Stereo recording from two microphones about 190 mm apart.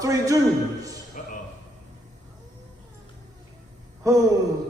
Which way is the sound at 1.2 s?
40° left (ahead or behind).